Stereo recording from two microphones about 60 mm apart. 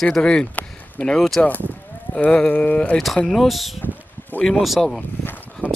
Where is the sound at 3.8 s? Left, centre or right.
Left.